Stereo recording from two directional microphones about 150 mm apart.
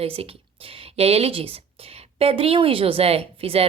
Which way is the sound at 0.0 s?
40° right (ahead or behind).